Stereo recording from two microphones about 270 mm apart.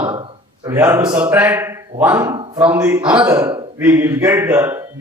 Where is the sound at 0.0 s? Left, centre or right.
Centre.